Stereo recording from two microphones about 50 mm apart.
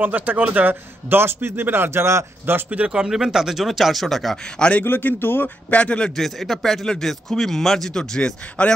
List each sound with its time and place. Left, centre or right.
0.0 s speech: right
0.7 s speech: right
2.9 s speech: centre
4.6 s speech: left
4.8 s speech: left
5.7 s speech: left
6.1 s speech: centre
8.0 s speech: left